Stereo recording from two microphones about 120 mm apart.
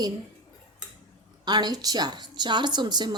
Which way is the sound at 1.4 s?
35° right (ahead or behind).